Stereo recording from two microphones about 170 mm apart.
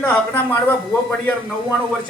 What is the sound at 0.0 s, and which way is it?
Speech, 10° left (ahead or behind).